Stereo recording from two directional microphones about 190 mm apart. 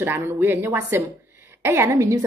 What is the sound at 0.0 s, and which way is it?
Speech, 10° right (ahead or behind).